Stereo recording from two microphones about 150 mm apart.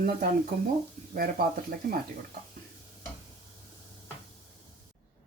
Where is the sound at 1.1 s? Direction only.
75° right (ahead or behind).